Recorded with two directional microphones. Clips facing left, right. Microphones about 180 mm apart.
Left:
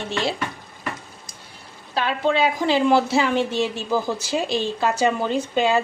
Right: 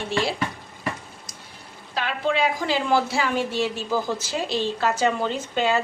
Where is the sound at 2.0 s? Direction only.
25° left (ahead or behind).